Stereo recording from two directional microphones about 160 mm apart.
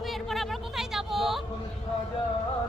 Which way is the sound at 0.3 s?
Centre (ahead or behind).